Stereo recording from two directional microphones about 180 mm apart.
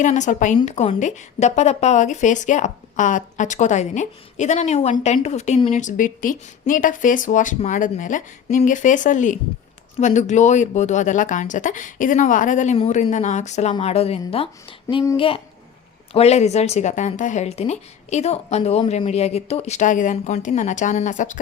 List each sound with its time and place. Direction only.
0.0 s a woman's voice: 45° left (ahead or behind)
5.8 s a woman's voice: 50° left (ahead or behind)